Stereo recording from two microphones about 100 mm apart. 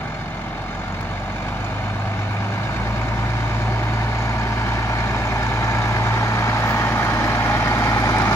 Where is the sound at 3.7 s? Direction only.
25° left (ahead or behind).